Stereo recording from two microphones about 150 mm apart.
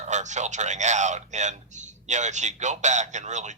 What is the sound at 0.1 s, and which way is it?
A man's voice, 50° right (ahead or behind).